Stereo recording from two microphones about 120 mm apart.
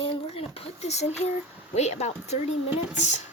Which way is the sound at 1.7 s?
70° left (ahead or behind).